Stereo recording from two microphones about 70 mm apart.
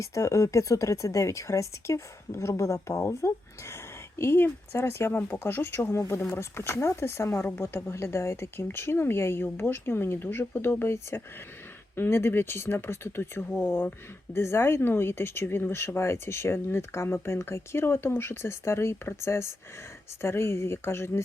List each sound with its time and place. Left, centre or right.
0.0 s speech: left